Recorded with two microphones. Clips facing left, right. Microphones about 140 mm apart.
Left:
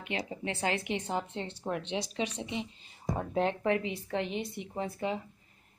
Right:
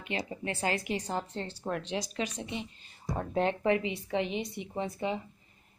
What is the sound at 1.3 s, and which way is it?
A woman's voice, 25° left (ahead or behind).